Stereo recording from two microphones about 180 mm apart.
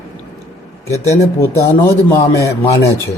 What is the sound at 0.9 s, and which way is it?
Speech, 15° left (ahead or behind).